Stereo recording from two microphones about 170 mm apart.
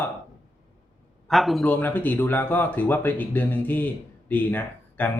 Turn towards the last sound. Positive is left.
turn(degrees=10)  # may be behind; listen again after turning